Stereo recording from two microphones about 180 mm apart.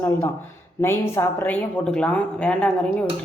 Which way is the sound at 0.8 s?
15° left (ahead or behind).